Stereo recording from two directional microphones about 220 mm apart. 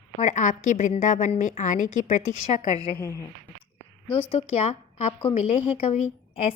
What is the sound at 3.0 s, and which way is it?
Speech, 15° left (ahead or behind).